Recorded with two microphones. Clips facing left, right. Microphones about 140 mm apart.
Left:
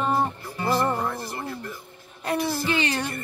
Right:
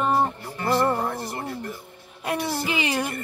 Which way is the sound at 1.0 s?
35° right (ahead or behind).